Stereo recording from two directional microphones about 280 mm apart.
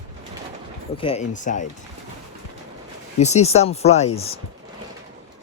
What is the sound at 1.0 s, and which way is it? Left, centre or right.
Speech, left.